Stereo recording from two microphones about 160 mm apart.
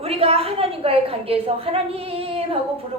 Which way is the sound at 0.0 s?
40° right (ahead or behind).